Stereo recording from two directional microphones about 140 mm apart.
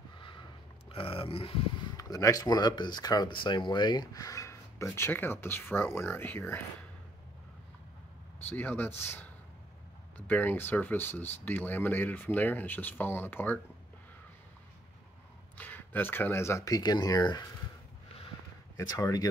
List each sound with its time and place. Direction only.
0.8 s a sound: 40° left (ahead or behind)
2.0 s speech: 25° left (ahead or behind)
8.5 s speech: 15° left (ahead or behind)
15.5 s speech: 10° left (ahead or behind); by 17.5 s 30° left (ahead or behind)
18.8 s speech: 25° left (ahead or behind)